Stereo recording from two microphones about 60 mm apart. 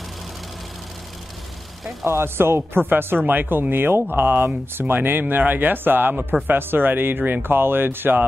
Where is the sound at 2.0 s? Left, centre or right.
Right.